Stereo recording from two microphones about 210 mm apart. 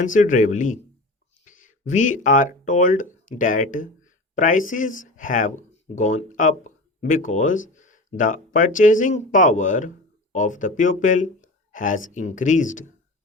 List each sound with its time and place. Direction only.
0.0 s speech: 40° left (ahead or behind)
1.5 s a sound: 40° left (ahead or behind)
1.9 s speech: 35° left (ahead or behind)